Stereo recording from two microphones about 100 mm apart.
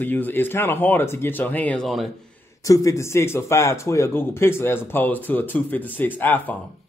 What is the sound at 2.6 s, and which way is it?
Speech, 35° left (ahead or behind).